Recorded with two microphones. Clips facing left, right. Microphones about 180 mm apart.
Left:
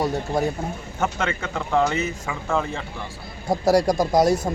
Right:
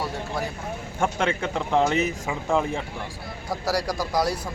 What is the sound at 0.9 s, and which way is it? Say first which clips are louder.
Speech: right 1 dB; 10° right (ahead or behind).